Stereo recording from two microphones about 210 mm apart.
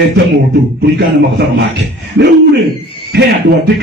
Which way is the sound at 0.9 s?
50° right (ahead or behind).